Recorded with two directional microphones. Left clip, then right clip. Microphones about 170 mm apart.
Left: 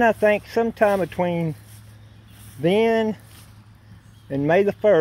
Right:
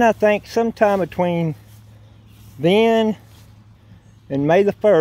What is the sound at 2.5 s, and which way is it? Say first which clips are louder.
Speech: right 4 dB; 30° right (ahead or behind).